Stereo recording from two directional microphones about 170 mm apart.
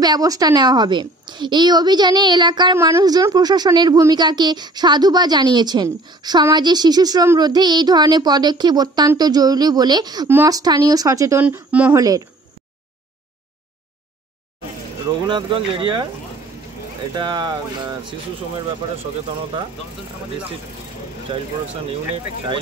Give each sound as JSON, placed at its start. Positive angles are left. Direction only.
{"t": 0.0, "sound": "a woman's voice", "side_deg": -20}
{"t": 15.2, "sound": "a woman's voice", "side_deg": -30}
{"t": 17.1, "sound": "a woman's voice", "side_deg": -30}
{"t": 21.3, "sound": "speech", "side_deg": -30}